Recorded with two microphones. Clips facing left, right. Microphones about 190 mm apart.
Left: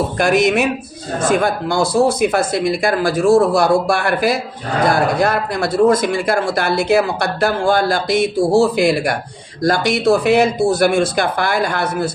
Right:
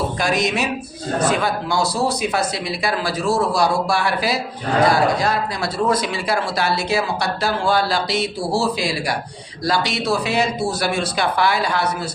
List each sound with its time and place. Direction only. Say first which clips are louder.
0.2 s speech: left 9 dB; 55° left (ahead or behind)